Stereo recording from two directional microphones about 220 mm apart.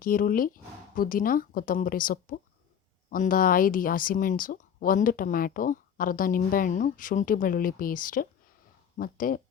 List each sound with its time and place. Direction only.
0.0 s speech: 40° left (ahead or behind)